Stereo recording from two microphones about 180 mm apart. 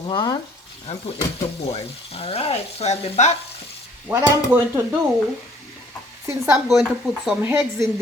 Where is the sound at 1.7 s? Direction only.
35° left (ahead or behind).